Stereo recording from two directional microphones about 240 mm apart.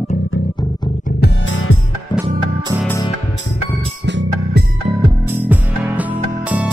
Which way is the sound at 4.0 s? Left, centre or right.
Right.